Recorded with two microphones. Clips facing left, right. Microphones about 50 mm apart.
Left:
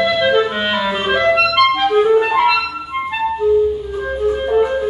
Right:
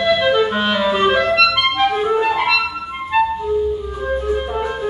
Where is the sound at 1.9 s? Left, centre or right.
Centre.